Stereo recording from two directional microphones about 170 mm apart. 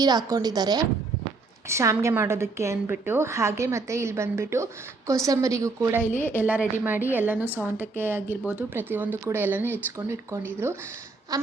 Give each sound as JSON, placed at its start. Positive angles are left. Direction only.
{"t": 0.0, "sound": "a woman's voice", "side_deg": -25}
{"t": 6.1, "sound": "a woman's voice", "side_deg": 10}
{"t": 6.3, "sound": "a woman's voice", "side_deg": -10}